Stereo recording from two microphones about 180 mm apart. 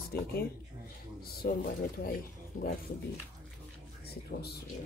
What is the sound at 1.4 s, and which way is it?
Speech, 55° left (ahead or behind).